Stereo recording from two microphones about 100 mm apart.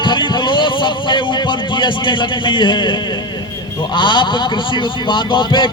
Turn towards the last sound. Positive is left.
turn(degrees=50)  # may be behind; listen again after turning